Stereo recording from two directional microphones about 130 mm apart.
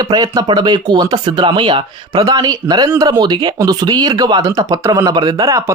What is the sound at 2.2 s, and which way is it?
Speech, 30° right (ahead or behind).